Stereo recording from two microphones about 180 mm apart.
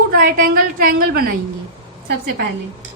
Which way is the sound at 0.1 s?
55° right (ahead or behind).